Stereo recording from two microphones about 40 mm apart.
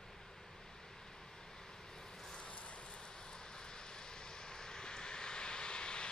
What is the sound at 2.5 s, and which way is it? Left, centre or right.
Vehicle, left.